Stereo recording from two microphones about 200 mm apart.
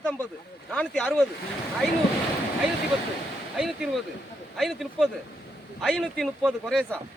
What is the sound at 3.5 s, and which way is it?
A man's voice, centre (ahead or behind).